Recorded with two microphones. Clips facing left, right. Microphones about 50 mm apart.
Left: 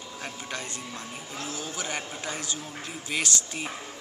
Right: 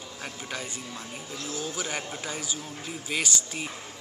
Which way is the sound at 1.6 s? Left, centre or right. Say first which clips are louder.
Right 2 dB; centre.